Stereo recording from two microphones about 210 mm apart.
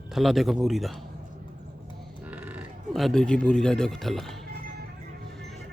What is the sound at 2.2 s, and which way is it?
Speech, 10° right (ahead or behind).